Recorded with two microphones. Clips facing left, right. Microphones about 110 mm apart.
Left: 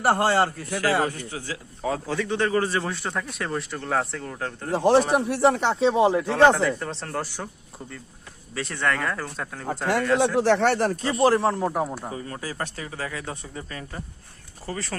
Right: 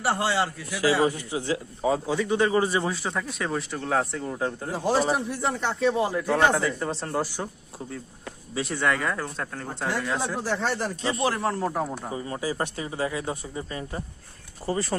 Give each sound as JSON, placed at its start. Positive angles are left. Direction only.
{"t": 0.0, "sound": "a man's voice", "side_deg": 50}
{"t": 1.3, "sound": "speech", "side_deg": -20}
{"t": 1.8, "sound": "speech", "side_deg": -10}
{"t": 2.9, "sound": "speech", "side_deg": 0}
{"t": 4.7, "sound": "speech", "side_deg": 70}
{"t": 6.2, "sound": "speech", "side_deg": -10}
{"t": 8.5, "sound": "speech", "side_deg": -10}
{"t": 10.4, "sound": "speech", "side_deg": 70}
{"t": 11.1, "sound": "speech", "side_deg": 35}
{"t": 11.3, "sound": "speech", "side_deg": 20}
{"t": 12.1, "sound": "speech", "side_deg": -15}